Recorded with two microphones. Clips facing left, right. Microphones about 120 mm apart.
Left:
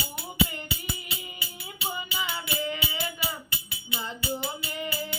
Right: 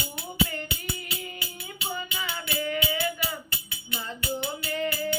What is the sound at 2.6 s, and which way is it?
Music, 20° left (ahead or behind).